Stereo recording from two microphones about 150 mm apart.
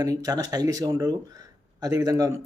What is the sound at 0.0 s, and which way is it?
Speech, 25° right (ahead or behind).